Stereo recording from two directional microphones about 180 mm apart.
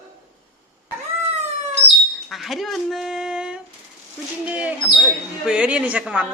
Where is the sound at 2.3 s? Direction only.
Centre (ahead or behind).